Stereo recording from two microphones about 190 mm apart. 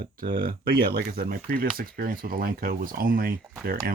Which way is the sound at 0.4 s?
55° right (ahead or behind).